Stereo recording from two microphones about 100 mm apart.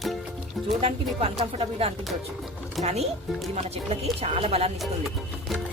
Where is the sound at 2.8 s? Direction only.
90° right.